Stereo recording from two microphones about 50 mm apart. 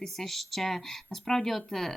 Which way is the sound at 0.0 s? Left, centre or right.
Centre.